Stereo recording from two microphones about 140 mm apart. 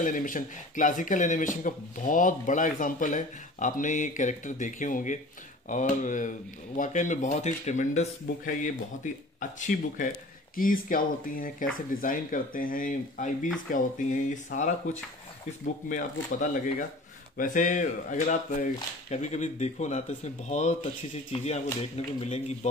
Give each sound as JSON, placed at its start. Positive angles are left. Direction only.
{"t": 0.0, "sound": "speech", "side_deg": 70}
{"t": 10.5, "sound": "speech", "side_deg": 85}